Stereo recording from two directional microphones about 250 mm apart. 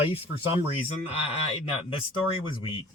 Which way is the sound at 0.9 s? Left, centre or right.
Left.